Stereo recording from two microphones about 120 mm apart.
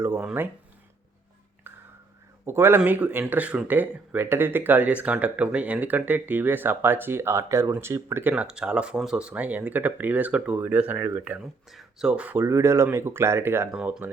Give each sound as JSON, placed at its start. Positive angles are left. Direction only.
{"t": 0.0, "sound": "speech", "side_deg": -20}
{"t": 1.7, "sound": "a sound", "side_deg": -20}
{"t": 2.5, "sound": "speech", "side_deg": -20}
{"t": 11.7, "sound": "speech", "side_deg": 0}
{"t": 12.4, "sound": "speech", "side_deg": -25}